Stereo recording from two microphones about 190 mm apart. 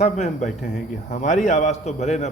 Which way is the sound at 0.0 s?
40° left (ahead or behind).